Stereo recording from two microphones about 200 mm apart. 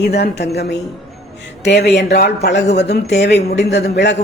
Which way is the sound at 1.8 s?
55° left (ahead or behind).